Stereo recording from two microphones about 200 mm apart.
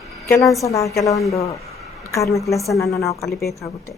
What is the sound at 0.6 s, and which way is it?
A woman's voice, 15° left (ahead or behind).